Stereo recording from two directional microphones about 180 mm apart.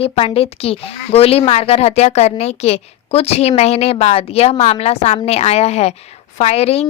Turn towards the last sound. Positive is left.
turn(degrees=35)  # may be behind; listen again after turning